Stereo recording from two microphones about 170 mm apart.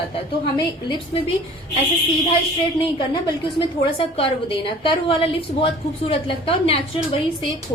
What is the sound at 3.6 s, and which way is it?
A woman's voice, 30° left (ahead or behind).